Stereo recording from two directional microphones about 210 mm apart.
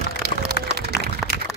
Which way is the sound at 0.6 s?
50° left (ahead or behind).